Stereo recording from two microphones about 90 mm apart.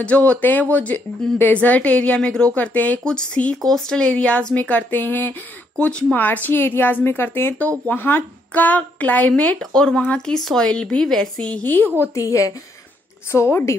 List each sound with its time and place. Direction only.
0.0 s a woman's voice: 15° left (ahead or behind)
12.0 s a woman's voice: 35° left (ahead or behind)